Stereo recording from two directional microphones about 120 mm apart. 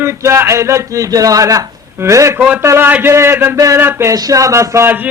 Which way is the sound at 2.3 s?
10° right (ahead or behind).